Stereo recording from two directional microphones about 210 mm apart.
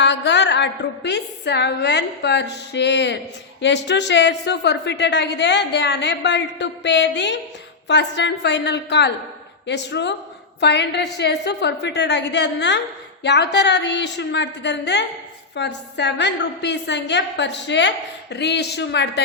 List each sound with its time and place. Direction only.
0.0 s speech: 55° left (ahead or behind)